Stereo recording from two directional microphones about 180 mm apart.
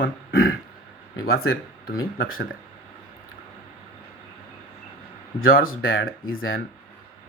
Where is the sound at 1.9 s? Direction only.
55° left (ahead or behind).